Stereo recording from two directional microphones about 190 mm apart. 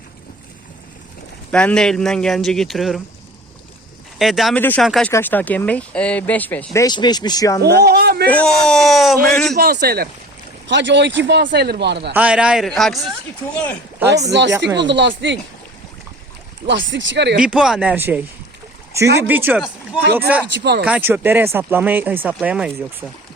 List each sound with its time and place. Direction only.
1.5 s a man's voice: 5° left (ahead or behind)
4.2 s a man's voice: centre (ahead or behind)
6.8 s speech: 20° left (ahead or behind)
7.6 s speech: 60° right (ahead or behind)
8.3 s a man's voice: 5° left (ahead or behind)
9.6 s speech: 55° right (ahead or behind)
10.7 s speech: 70° right (ahead or behind)
12.1 s a man's voice: 5° right (ahead or behind)
14.3 s speech: 65° right (ahead or behind)
16.6 s speech: 75° right (ahead or behind)
17.4 s speech: 5° right (ahead or behind)